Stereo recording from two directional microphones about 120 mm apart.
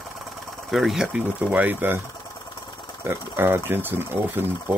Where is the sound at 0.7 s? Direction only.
Centre (ahead or behind).